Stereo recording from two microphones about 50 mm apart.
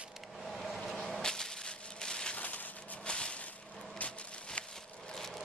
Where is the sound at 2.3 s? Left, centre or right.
Left.